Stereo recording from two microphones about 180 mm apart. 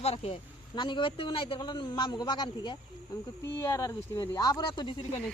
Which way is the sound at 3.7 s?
15° left (ahead or behind).